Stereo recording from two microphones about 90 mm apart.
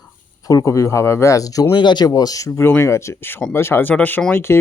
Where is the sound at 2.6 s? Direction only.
25° left (ahead or behind).